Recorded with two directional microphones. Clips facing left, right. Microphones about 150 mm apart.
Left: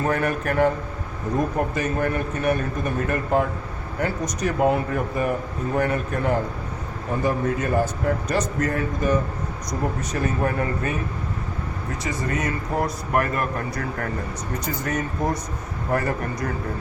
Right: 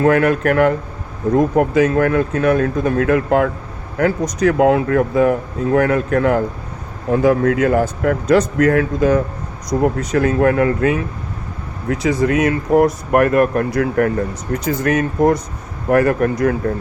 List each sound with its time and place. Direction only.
0.0 s speech: 85° right
12.8 s speech: 60° right (ahead or behind)